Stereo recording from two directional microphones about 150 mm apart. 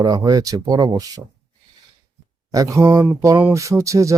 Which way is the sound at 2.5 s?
20° right (ahead or behind).